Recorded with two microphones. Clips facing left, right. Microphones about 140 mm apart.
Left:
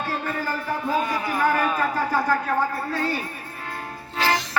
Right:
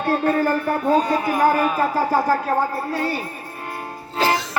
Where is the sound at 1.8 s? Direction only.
35° right (ahead or behind).